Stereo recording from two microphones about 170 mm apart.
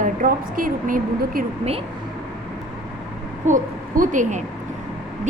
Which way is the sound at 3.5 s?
50° right (ahead or behind).